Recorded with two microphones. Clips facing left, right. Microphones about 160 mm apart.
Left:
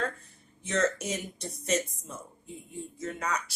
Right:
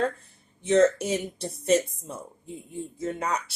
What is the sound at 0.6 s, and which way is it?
A woman's voice, 30° right (ahead or behind).